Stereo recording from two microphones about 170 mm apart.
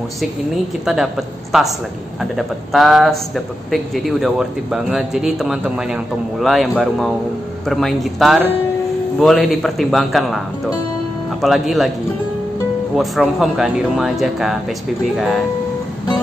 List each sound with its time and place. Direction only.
0.8 s a man's voice: 5° right (ahead or behind)
11.4 s a man's voice: centre (ahead or behind)
12.9 s a man's voice: centre (ahead or behind)